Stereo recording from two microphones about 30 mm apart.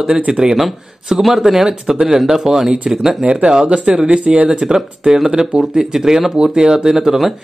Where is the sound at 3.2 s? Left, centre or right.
Right.